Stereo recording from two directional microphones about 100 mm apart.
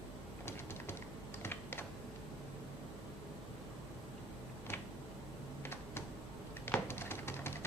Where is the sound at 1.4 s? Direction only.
25° left (ahead or behind).